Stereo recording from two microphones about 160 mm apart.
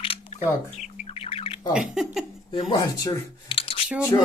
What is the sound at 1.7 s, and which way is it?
Speech, 5° right (ahead or behind).